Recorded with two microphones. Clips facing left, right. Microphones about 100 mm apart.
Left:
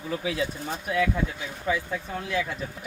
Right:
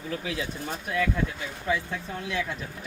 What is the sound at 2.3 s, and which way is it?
Speech, centre (ahead or behind).